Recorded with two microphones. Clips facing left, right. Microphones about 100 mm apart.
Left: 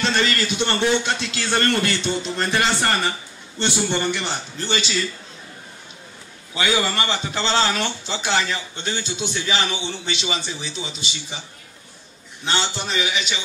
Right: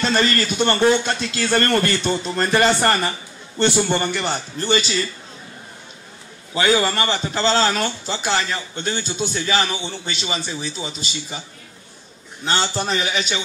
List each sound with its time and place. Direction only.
0.0 s a man's voice: 45° right (ahead or behind)
6.5 s a man's voice: 40° right (ahead or behind)
12.4 s a man's voice: 45° right (ahead or behind)